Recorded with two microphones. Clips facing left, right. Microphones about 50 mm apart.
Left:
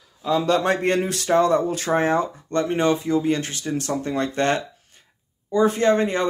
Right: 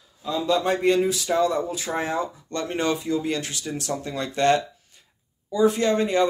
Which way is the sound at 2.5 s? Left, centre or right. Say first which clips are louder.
Left 5 dB; left.